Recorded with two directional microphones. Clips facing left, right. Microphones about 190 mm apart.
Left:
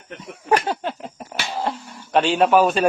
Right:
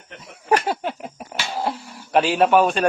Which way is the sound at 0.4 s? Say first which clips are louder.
Even; 10° right (ahead or behind).